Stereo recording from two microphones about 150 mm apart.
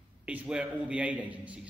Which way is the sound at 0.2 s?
10° right (ahead or behind).